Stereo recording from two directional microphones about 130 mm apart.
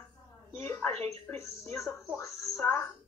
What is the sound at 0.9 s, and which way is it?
Speech, 50° right (ahead or behind).